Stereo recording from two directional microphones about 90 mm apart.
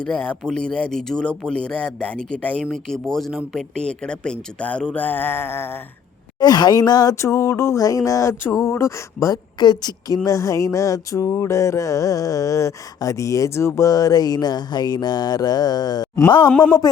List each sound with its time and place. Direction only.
0.0 s speech: 15° left (ahead or behind)
6.4 s mantra: 50° left (ahead or behind); by 9.4 s 35° left (ahead or behind)
9.6 s a woman's voice: 50° left (ahead or behind)
10.2 s mantra: 35° left (ahead or behind)
16.5 s speech: 10° left (ahead or behind)